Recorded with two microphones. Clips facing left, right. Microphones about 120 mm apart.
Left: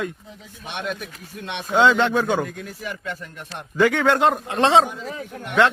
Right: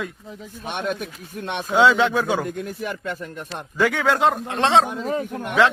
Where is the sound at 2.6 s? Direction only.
50° right (ahead or behind).